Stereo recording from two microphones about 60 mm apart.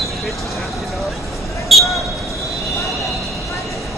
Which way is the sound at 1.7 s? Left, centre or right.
Centre.